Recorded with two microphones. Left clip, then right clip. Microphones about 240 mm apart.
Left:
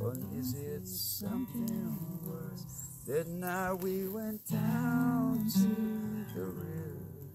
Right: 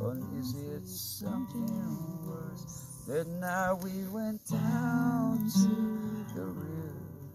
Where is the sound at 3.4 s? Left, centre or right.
Left.